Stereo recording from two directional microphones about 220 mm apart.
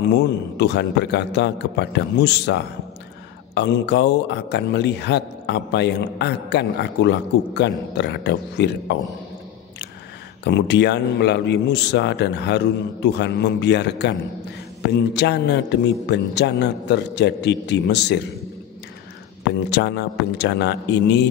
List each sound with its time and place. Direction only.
0.0 s a man's voice: 50° left (ahead or behind)
10.4 s a man's voice: 50° left (ahead or behind)
19.7 s a man's voice: 50° left (ahead or behind)